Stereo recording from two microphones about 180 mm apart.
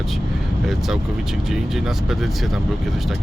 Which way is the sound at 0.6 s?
Centre (ahead or behind).